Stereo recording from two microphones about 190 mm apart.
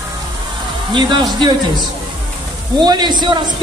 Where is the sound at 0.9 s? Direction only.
25° right (ahead or behind).